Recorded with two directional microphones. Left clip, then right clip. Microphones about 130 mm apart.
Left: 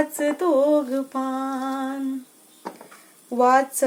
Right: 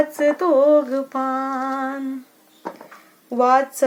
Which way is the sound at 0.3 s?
20° left (ahead or behind).